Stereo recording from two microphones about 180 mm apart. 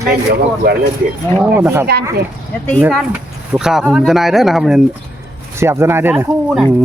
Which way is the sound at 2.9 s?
5° right (ahead or behind).